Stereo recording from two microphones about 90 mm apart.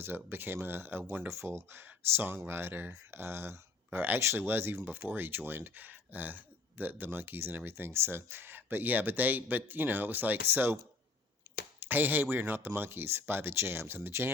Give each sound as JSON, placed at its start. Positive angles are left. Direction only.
{"t": 0.0, "sound": "speech", "side_deg": -25}
{"t": 11.5, "sound": "a sound", "side_deg": -35}
{"t": 11.8, "sound": "speech", "side_deg": -20}